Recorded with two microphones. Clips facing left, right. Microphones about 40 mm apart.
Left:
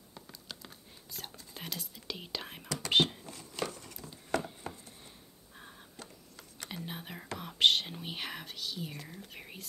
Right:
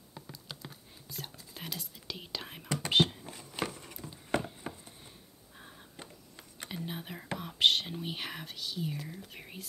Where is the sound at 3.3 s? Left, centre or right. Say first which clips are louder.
Right 1 dB; centre.